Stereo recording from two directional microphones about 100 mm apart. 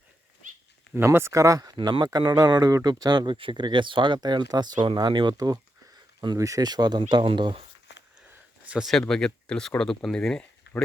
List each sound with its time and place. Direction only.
0.9 s speech: 25° right (ahead or behind)
1.7 s speech: 50° right (ahead or behind)
8.6 s a sound: 15° right (ahead or behind)
8.9 s speech: 5° left (ahead or behind)